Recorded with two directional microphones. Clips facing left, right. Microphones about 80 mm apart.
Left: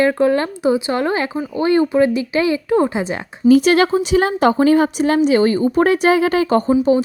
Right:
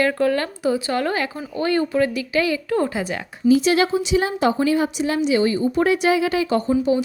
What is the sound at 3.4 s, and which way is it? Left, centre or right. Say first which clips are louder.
A woman's voice: left 5 dB; left.